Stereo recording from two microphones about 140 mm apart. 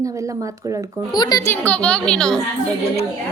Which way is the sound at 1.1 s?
30° left (ahead or behind).